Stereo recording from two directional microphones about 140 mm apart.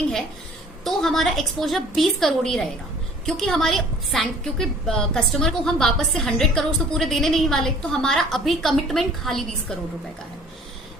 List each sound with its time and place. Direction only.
0.9 s a woman's voice: centre (ahead or behind)